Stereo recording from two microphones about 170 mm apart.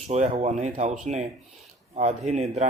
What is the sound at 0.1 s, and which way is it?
Speech, 40° right (ahead or behind).